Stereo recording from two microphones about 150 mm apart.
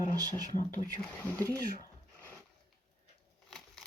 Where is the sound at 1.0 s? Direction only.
10° left (ahead or behind).